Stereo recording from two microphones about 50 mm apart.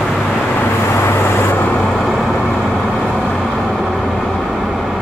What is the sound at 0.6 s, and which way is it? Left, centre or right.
Vehicle, left.